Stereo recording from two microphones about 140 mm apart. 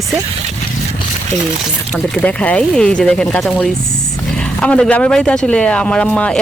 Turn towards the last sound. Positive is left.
turn(degrees=10)  # may be behind; listen again after turning